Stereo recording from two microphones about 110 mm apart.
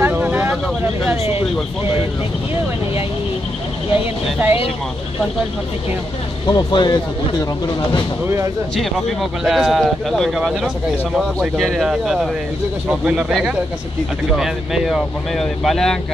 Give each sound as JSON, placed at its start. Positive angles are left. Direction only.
{"t": 0.0, "sound": "vehicle", "side_deg": -15}
{"t": 4.0, "sound": "speech", "side_deg": -15}
{"t": 6.5, "sound": "speech", "side_deg": 40}
{"t": 8.7, "sound": "speech", "side_deg": 0}